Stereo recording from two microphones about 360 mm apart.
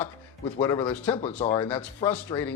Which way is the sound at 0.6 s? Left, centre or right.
Centre.